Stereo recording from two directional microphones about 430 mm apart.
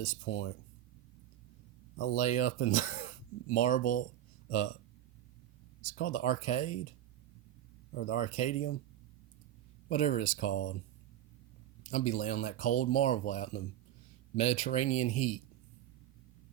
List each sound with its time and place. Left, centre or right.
0.0 s speech: centre
2.0 s speech: centre
5.9 s speech: centre
7.9 s speech: left
9.9 s speech: centre
11.8 s speech: centre